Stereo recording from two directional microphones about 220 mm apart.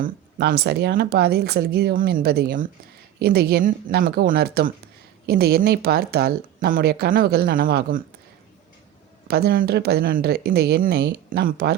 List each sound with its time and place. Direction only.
0.0 s speech: 45° right (ahead or behind)
9.2 s speech: 45° right (ahead or behind)